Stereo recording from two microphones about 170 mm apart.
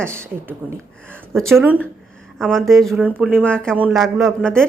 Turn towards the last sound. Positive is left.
turn(degrees=5)  # may be behind; listen again after turning